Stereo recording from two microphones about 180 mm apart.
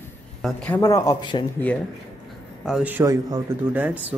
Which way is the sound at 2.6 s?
5° right (ahead or behind).